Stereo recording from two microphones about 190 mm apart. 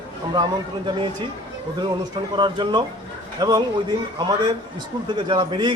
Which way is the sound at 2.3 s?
25° right (ahead or behind).